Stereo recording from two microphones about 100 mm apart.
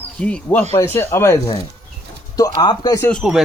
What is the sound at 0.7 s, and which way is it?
Speech, 25° left (ahead or behind).